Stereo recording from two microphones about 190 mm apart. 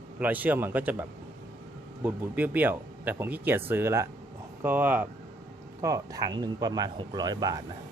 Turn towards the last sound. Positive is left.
turn(degrees=-20)  # may be behind; listen again after turning